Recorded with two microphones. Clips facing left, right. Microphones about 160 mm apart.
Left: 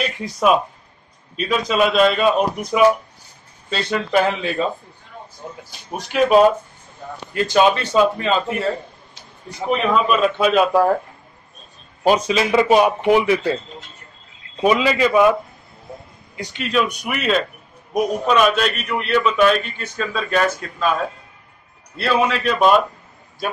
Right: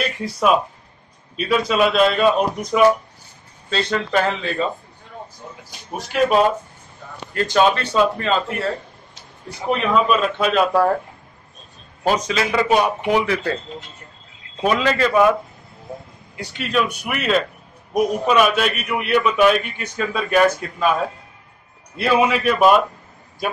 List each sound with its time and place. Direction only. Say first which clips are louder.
0.2 s a man's voice: left 1 dB; centre (ahead or behind)
7.3 s a man's voice: left 1 dB; 10° left (ahead or behind)
9.7 s a man's voice: even; 5° left (ahead or behind)
12.0 s a man's voice: left 3 dB; 15° left (ahead or behind)
14.6 s a man's voice: left 2 dB; 10° left (ahead or behind)
16.3 s a man's voice: left 1 dB; 5° right (ahead or behind)
21.9 s a man's voice: right 2 dB; 15° right (ahead or behind)